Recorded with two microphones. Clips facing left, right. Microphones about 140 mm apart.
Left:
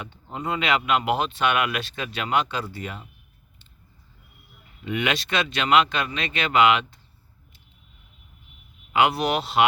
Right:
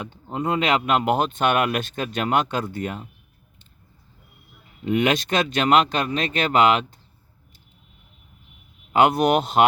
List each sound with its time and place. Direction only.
0.0 s speech: 40° right (ahead or behind)
4.9 s speech: 45° right (ahead or behind)
8.9 s speech: 45° right (ahead or behind)